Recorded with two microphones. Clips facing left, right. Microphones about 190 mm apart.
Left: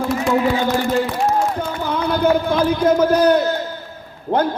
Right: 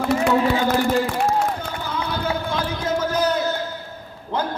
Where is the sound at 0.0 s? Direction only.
65° right (ahead or behind).